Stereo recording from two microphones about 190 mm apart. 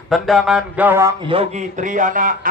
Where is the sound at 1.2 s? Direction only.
35° right (ahead or behind).